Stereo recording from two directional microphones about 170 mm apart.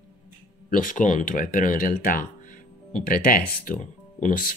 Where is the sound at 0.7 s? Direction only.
50° left (ahead or behind).